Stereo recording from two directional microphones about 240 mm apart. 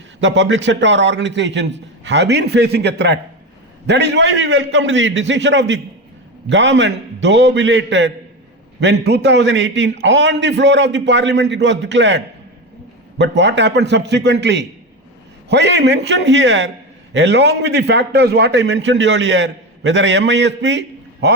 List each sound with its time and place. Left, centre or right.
0.2 s a man's voice: right